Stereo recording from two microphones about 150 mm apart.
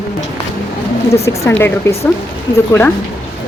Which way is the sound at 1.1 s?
20° left (ahead or behind).